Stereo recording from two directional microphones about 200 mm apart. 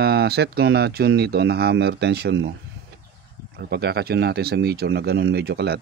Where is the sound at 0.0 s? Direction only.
50° right (ahead or behind).